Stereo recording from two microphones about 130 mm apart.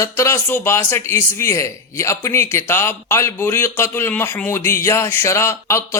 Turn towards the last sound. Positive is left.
turn(degrees=20)  # may be behind; listen again after turning